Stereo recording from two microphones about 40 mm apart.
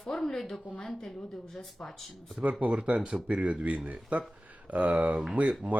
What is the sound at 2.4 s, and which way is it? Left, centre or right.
Speech, right.